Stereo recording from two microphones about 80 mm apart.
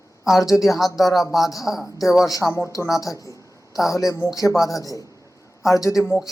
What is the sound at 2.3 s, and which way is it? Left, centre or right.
Speech, left.